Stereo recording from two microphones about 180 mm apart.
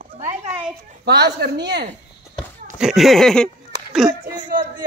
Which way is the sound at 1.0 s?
65° right (ahead or behind).